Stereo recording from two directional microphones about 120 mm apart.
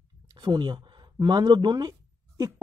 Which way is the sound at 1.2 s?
35° right (ahead or behind).